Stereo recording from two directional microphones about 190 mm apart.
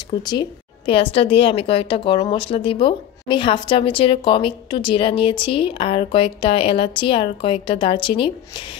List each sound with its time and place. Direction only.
0.2 s a woman's voice: 25° left (ahead or behind)